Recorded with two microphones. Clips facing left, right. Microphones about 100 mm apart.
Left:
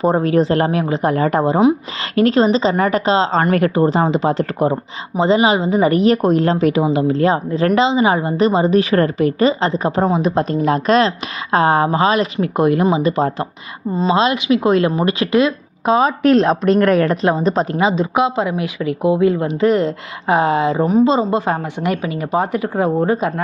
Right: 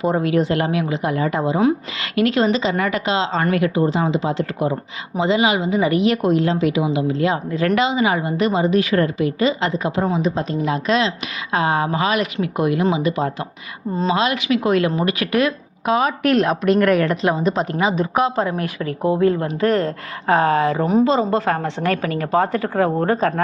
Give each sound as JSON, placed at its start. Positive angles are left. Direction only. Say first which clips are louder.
{"t": 0.0, "sound": "a woman's voice", "louder": "left 4 dB", "side_deg": 40}
{"t": 2.1, "sound": "a woman's voice", "louder": "left 4 dB", "side_deg": 35}
{"t": 10.1, "sound": "a woman's voice", "louder": "left 4 dB", "side_deg": 55}
{"t": 14.1, "sound": "a woman's voice", "louder": "left 4 dB", "side_deg": 25}
{"t": 18.1, "sound": "speech", "louder": "left 2 dB", "side_deg": 15}
{"t": 18.5, "sound": "a woman's voice", "louder": "left 3 dB", "side_deg": -45}
{"t": 19.0, "sound": "speech", "louder": "left 2 dB", "side_deg": 15}